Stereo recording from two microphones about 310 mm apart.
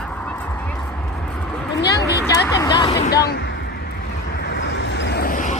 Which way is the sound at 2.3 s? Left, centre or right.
Centre.